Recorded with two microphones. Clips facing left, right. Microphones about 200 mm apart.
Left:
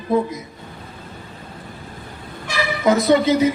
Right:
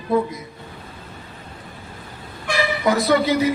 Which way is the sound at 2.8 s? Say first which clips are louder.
Left 4 dB; 20° left (ahead or behind).